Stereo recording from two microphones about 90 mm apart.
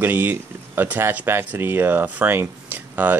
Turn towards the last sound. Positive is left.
turn(degrees=-20)  # may be behind; listen again after turning